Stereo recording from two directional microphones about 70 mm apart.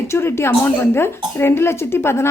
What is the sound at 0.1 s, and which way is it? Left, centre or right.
Speech, left.